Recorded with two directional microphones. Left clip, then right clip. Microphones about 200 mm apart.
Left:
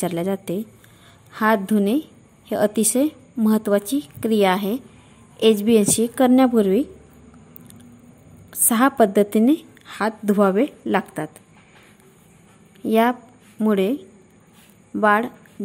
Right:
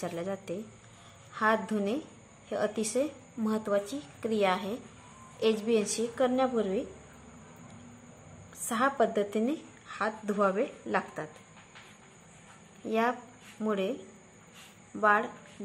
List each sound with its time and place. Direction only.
0.0 s a woman's voice: 45° left (ahead or behind)
8.5 s a woman's voice: 50° left (ahead or behind)
12.8 s a woman's voice: 45° left (ahead or behind)
15.0 s a woman's voice: 45° left (ahead or behind)